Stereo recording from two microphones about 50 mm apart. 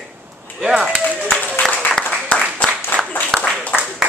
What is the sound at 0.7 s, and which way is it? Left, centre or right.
Speech, centre.